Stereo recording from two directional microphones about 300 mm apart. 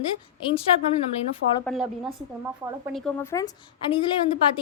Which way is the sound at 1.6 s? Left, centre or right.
Centre.